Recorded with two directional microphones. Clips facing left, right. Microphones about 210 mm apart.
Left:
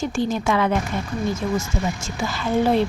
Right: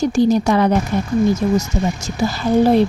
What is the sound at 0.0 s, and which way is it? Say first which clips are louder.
Speech: right 8 dB; 40° right (ahead or behind).